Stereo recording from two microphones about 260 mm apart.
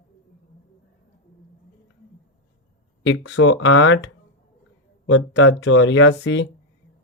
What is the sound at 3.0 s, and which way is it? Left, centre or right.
Speech, left.